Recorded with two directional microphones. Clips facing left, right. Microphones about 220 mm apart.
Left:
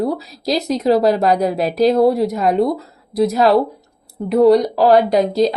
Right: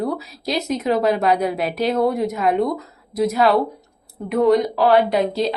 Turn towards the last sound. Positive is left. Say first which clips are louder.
# left 4 dB
turn(degrees=40)  # may be behind; listen again after turning